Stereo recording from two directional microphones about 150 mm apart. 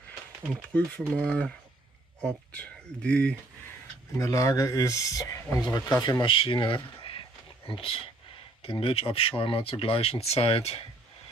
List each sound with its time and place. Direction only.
0.5 s speech: 5° left (ahead or behind)
4.2 s speech: 20° left (ahead or behind); by 10.9 s 40° left (ahead or behind)